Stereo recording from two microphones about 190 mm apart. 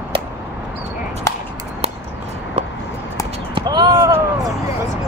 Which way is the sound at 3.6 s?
20° right (ahead or behind).